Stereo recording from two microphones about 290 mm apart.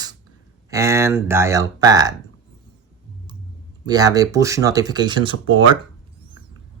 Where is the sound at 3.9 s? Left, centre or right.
Centre.